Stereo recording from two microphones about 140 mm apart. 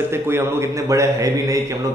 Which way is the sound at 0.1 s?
15° right (ahead or behind).